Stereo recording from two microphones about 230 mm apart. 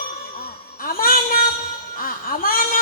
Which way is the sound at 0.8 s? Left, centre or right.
Left.